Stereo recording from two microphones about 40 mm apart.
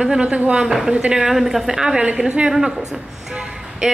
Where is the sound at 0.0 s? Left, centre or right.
Centre.